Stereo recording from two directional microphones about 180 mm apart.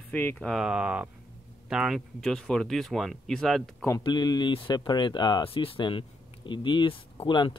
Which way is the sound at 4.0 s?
25° left (ahead or behind).